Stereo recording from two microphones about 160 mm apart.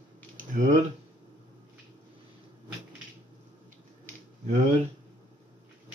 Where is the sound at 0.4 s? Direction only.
50° right (ahead or behind).